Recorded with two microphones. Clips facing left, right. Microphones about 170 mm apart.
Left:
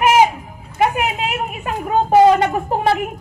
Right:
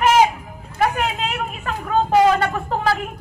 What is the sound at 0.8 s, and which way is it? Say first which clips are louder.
A woman's voice: left 2 dB; 10° left (ahead or behind).